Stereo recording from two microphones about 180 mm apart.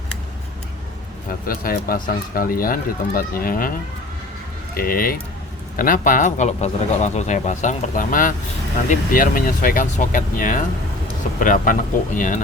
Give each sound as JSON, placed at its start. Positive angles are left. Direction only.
{"t": 1.3, "sound": "a man's voice", "side_deg": 55}
{"t": 4.7, "sound": "a man's voice", "side_deg": 55}